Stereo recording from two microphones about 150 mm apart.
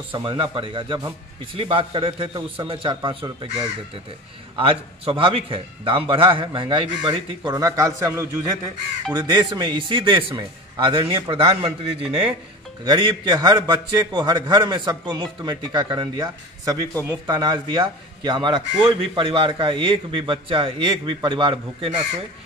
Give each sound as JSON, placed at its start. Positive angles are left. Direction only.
{"t": 0.1, "sound": "a man's voice", "side_deg": -35}
{"t": 4.6, "sound": "a man's voice", "side_deg": -35}
{"t": 7.5, "sound": "a man's voice", "side_deg": -20}